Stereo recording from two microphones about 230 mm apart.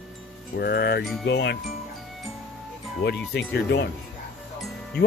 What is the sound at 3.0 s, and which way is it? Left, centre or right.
Speech, left.